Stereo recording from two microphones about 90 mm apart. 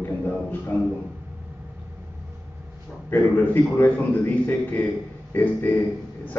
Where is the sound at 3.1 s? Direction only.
20° left (ahead or behind).